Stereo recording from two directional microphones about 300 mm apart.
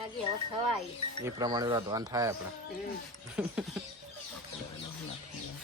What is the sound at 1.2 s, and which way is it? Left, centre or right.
Speech, centre.